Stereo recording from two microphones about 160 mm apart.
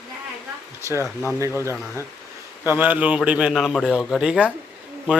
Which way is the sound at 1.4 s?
15° right (ahead or behind).